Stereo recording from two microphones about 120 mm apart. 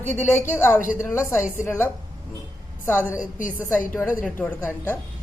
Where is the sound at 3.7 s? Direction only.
20° left (ahead or behind).